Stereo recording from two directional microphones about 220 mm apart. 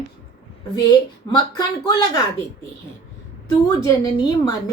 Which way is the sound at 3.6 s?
20° left (ahead or behind).